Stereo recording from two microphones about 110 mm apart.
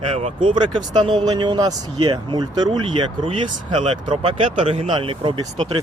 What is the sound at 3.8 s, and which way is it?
Speech, 65° right (ahead or behind).